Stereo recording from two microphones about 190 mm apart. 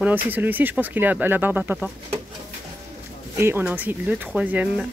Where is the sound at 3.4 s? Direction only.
10° right (ahead or behind).